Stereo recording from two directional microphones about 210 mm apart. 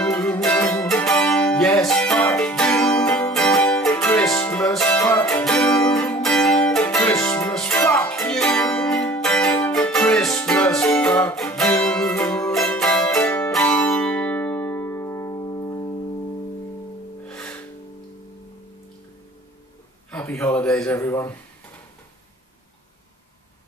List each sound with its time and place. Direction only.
0.0 s music: 10° left (ahead or behind)
7.8 s music: 15° left (ahead or behind)
8.2 s music: 5° left (ahead or behind)
17.3 s music: 5° left (ahead or behind)
20.1 s a sound: 10° left (ahead or behind)
20.9 s speech: 15° left (ahead or behind)